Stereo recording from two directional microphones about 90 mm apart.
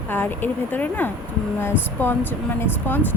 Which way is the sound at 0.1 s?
20° left (ahead or behind).